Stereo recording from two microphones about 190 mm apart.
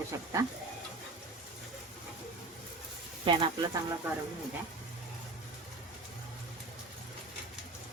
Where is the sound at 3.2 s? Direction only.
25° right (ahead or behind).